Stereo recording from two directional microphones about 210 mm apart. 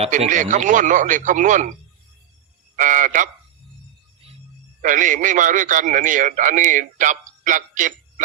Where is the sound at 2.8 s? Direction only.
40° right (ahead or behind).